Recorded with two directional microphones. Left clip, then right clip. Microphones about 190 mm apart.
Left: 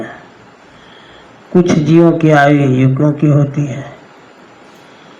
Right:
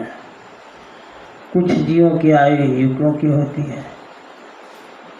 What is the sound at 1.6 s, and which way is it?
Mantra, 40° left (ahead or behind).